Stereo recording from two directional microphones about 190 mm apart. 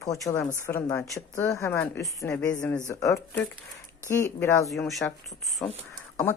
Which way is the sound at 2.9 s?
15° left (ahead or behind).